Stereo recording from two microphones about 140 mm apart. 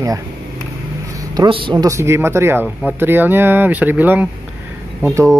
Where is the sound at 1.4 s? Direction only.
40° right (ahead or behind).